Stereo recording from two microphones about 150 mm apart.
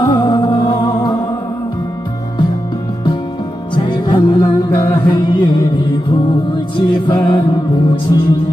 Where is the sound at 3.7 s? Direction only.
30° left (ahead or behind).